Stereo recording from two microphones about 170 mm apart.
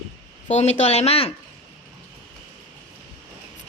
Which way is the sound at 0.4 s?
40° left (ahead or behind).